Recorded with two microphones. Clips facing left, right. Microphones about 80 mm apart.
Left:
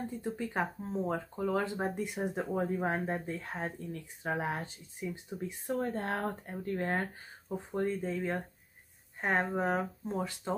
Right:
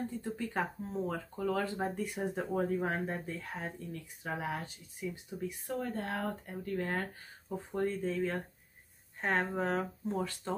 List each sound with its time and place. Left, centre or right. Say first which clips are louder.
0.2 s speech: left 4 dB; centre
7.4 s speech: left 1 dB; centre